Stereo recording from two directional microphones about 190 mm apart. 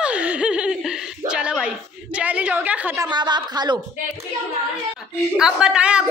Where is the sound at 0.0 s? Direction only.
5° right (ahead or behind).